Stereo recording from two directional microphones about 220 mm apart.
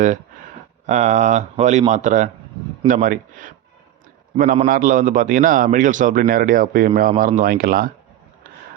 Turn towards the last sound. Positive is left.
turn(degrees=-40)  # may be behind; listen again after turning